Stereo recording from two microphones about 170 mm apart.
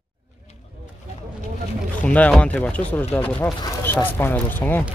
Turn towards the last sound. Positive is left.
turn(degrees=10)  # may be behind; listen again after turning